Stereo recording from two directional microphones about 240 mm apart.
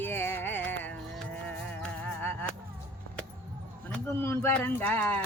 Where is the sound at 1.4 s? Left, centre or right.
Centre.